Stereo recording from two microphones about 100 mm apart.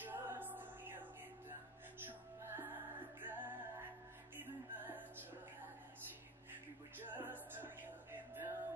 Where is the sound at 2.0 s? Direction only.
20° right (ahead or behind).